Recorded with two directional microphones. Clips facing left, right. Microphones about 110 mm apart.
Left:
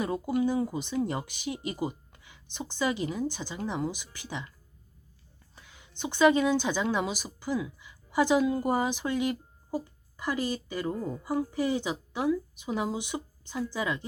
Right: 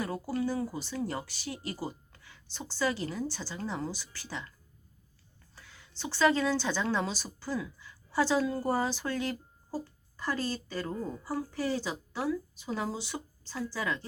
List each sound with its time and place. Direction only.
0.0 s speech: 20° left (ahead or behind)
5.5 s whispering: 20° left (ahead or behind)
6.0 s speech: 20° left (ahead or behind)